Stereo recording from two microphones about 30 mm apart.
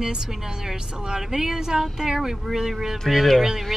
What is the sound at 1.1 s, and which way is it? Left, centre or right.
A woman's voice, centre.